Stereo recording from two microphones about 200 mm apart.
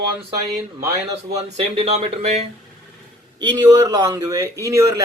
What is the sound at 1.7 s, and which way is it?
Speech, 30° right (ahead or behind).